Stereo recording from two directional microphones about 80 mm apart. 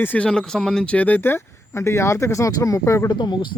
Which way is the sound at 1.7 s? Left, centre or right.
Left.